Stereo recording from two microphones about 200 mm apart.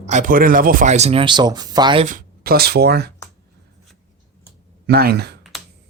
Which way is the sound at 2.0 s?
45° right (ahead or behind).